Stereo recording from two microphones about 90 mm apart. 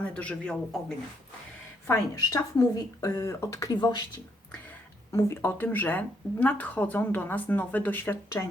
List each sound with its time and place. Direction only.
0.0 s speech: 15° left (ahead or behind)
2.1 s speech: 40° left (ahead or behind)
3.7 s speech: 50° left (ahead or behind)
5.1 s speech: 25° left (ahead or behind)